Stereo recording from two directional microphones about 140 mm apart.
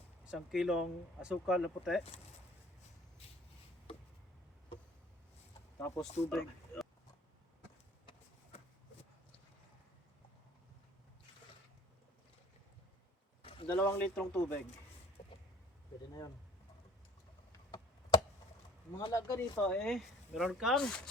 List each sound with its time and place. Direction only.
0.3 s speech: 5° right (ahead or behind)
5.8 s speech: 5° left (ahead or behind)
13.7 s a man's voice: 15° left (ahead or behind)
15.2 s a sound: 50° left (ahead or behind)
19.1 s speech: 20° left (ahead or behind)
19.6 s speech: 5° left (ahead or behind)